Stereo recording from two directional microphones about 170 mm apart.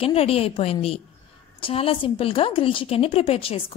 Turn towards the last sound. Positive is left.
turn(degrees=35)  # may be behind; listen again after turning